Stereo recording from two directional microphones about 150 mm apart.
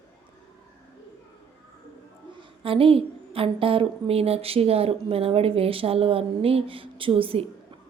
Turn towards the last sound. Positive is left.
turn(degrees=-40)  # may be behind; listen again after turning